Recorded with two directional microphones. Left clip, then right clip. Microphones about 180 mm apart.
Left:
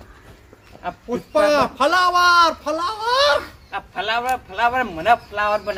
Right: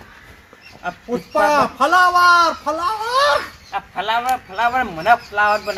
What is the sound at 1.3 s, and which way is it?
A man's voice, 25° left (ahead or behind).